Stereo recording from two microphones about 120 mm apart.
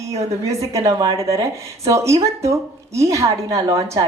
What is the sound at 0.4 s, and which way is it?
A woman's voice, 25° right (ahead or behind).